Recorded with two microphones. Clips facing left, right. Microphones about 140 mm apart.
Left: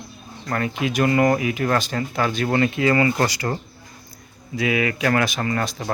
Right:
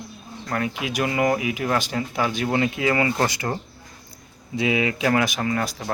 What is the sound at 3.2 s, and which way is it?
Speech, 20° right (ahead or behind).